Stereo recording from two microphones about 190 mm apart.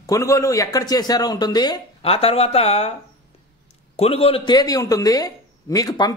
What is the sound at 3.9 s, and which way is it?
Speech, 30° left (ahead or behind).